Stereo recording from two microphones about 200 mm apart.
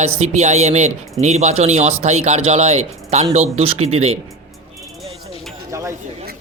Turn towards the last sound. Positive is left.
turn(degrees=-15)  # may be behind; listen again after turning